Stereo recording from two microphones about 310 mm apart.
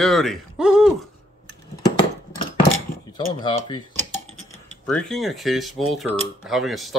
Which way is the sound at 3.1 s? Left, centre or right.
Centre.